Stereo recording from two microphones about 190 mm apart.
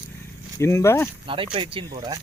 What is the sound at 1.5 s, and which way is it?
Speech, 25° right (ahead or behind).